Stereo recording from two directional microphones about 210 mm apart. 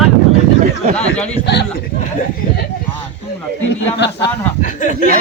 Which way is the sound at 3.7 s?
55° left (ahead or behind).